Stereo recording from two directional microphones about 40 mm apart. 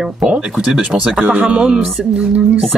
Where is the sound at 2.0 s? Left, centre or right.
Centre.